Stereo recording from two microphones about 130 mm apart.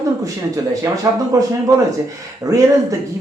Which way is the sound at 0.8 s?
25° right (ahead or behind).